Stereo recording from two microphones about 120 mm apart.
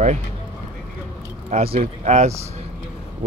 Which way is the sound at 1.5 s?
60° right (ahead or behind).